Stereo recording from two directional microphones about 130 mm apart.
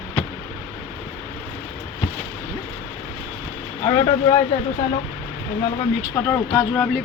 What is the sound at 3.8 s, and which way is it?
Speech, 35° left (ahead or behind).